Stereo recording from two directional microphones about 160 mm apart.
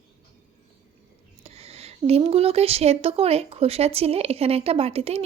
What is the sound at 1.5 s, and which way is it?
Speech, 40° right (ahead or behind).